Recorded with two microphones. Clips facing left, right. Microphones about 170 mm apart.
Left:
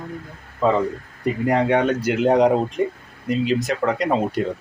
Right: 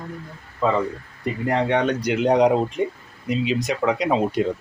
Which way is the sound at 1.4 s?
10° left (ahead or behind).